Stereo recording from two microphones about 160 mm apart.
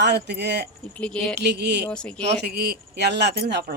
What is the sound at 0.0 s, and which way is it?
Speech, 90° right.